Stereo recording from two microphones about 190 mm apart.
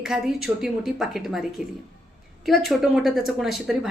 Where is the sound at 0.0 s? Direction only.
5° right (ahead or behind).